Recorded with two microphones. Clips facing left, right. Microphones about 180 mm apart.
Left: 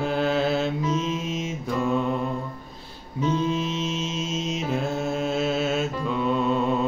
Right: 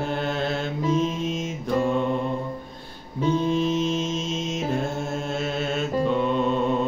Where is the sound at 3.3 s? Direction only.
40° right (ahead or behind).